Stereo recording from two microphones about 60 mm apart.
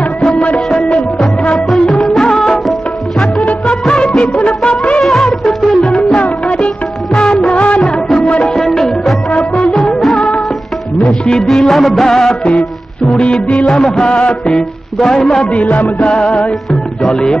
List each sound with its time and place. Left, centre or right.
0.2 s music: centre
1.7 s music: centre
3.3 s music of bollywood: left
5.0 s music: centre
5.8 s music: centre
8.6 s music: centre
9.3 s music: centre
13.2 s music: left
15.5 s music: left
17.0 s speech: centre